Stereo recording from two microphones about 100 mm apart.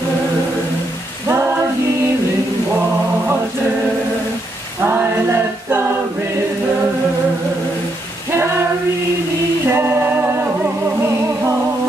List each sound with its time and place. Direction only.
4.8 s a capella: 25° right (ahead or behind)
9.7 s music: 25° right (ahead or behind)